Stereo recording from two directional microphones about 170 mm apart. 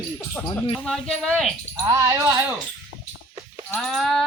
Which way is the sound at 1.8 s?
20° right (ahead or behind).